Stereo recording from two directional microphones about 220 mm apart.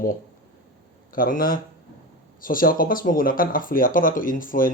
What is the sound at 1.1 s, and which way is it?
Speech, 40° left (ahead or behind).